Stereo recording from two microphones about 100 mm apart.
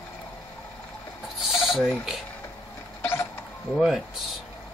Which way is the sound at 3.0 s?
20° left (ahead or behind).